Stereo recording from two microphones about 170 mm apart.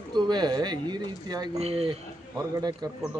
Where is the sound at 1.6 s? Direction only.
35° right (ahead or behind).